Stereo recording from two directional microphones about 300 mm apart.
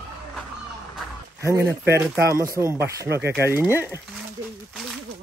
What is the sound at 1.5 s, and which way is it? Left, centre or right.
Speech, centre.